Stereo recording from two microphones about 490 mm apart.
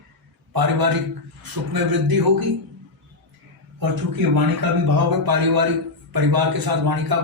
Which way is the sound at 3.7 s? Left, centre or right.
Right.